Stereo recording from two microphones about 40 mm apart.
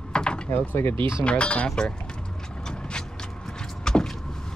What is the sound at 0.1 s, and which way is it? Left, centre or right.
Door, left.